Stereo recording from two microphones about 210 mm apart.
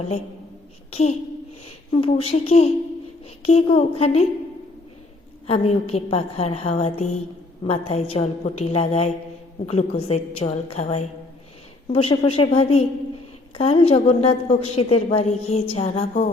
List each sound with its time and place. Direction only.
0.9 s a woman's voice: 30° left (ahead or behind)
5.5 s a woman's voice: 30° left (ahead or behind)